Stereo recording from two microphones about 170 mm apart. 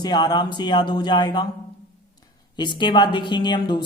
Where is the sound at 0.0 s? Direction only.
25° left (ahead or behind).